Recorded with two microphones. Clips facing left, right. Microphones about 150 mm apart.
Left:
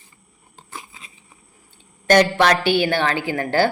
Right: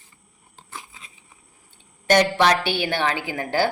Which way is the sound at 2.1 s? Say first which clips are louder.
Left 2 dB; 15° right (ahead or behind).